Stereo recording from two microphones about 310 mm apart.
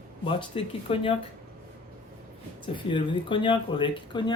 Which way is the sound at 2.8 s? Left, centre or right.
Centre.